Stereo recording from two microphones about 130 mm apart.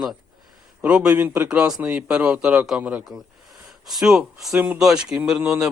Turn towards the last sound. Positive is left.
turn(degrees=-10)  # may be behind; listen again after turning